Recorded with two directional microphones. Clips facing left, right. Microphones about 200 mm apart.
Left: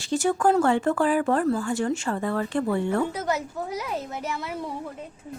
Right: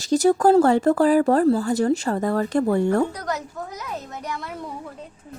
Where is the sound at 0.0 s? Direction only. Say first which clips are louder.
Right 5 dB; 40° right (ahead or behind).